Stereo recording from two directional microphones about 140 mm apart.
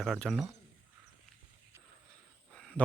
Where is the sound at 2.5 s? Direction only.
5° left (ahead or behind).